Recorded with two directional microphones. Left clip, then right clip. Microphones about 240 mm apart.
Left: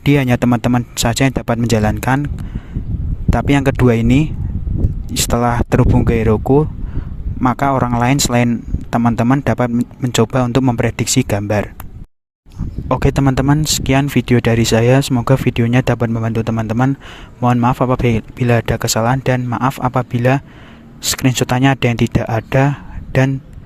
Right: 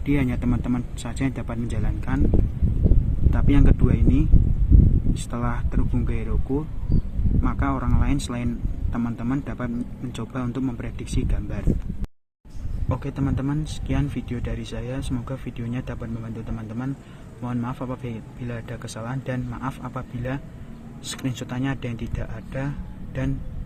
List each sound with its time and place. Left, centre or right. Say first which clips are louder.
0.0 s speech: left 11 dB; left
3.2 s speech: left 9 dB; left
7.4 s speech: left 13 dB; left
12.9 s speech: left 14 dB; left